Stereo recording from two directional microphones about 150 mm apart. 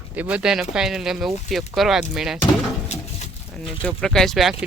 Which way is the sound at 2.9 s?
45° left (ahead or behind).